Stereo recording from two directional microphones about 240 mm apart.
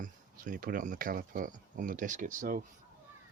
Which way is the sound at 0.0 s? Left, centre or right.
Right.